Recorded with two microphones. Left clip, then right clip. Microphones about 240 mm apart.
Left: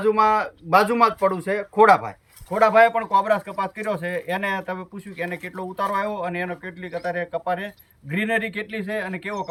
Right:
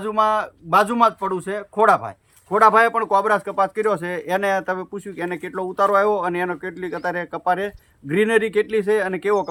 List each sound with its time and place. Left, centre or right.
0.0 s speech: centre
2.5 s speech: centre